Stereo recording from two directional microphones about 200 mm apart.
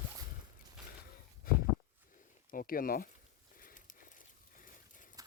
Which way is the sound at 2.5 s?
45° left (ahead or behind).